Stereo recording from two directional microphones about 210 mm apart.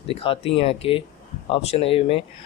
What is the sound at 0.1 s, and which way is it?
Speech, 30° left (ahead or behind).